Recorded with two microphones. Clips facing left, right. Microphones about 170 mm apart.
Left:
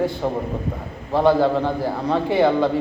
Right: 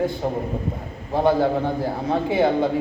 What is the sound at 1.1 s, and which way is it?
A man's voice, 65° left (ahead or behind).